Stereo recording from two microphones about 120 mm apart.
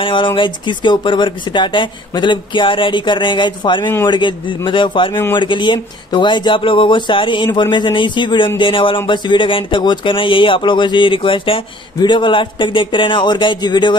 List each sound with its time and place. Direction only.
0.0 s speech: 45° left (ahead or behind)